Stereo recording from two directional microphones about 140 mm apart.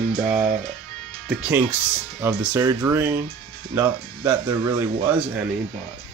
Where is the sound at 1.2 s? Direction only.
10° right (ahead or behind).